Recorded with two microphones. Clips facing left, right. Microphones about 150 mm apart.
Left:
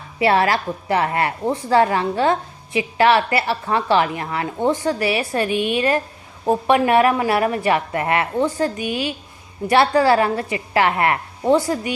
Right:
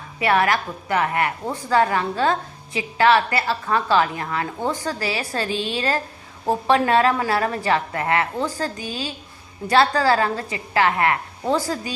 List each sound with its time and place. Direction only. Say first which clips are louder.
0.2 s a woman's voice: left 2 dB; 25° left (ahead or behind)
6.5 s a woman's voice: left 2 dB; 20° left (ahead or behind)